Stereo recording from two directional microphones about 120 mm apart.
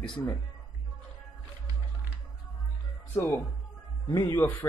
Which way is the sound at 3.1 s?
25° left (ahead or behind).